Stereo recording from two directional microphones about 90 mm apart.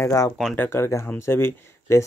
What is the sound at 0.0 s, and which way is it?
Speech, 40° left (ahead or behind).